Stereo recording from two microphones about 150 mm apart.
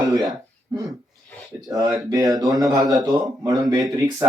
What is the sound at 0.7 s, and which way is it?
Speech, 25° right (ahead or behind).